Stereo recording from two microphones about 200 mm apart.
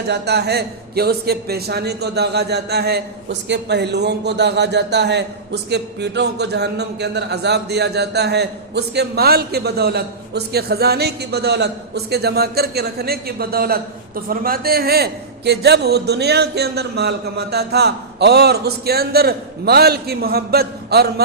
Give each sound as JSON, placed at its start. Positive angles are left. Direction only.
{"t": 0.1, "sound": "a man's voice", "side_deg": -55}